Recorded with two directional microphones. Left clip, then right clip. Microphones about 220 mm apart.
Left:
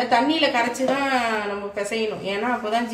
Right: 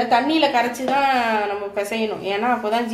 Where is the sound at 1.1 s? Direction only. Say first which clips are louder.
Right 3 dB; 45° right (ahead or behind).